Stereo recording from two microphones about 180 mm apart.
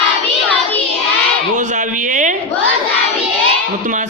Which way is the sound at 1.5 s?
45° right (ahead or behind).